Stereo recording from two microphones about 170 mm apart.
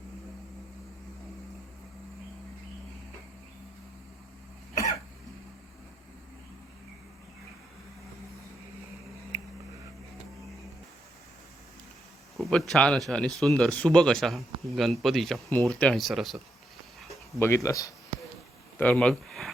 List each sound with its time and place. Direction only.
12.4 s speech: centre (ahead or behind)
17.4 s speech: 15° left (ahead or behind)
18.8 s speech: 5° left (ahead or behind)